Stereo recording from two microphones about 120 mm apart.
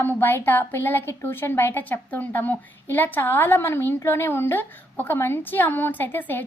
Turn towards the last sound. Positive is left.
turn(degrees=15)  # may be behind; listen again after turning